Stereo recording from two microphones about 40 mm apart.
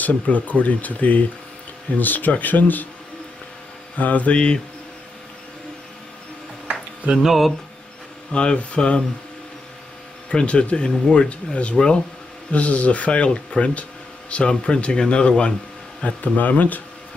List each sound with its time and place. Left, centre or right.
0.0 s speech: left
3.9 s speech: left
7.2 s speech: centre
8.3 s speech: left
10.3 s speech: left
11.2 s speech: left
12.5 s speech: left
16.3 s speech: left